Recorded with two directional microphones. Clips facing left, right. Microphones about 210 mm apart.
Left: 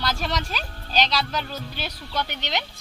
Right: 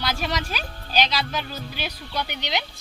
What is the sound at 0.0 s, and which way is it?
Speech, 5° right (ahead or behind).